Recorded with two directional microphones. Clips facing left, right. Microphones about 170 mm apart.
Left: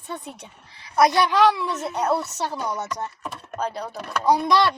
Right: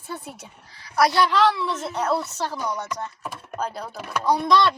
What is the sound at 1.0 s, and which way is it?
A woman's voice, 15° left (ahead or behind).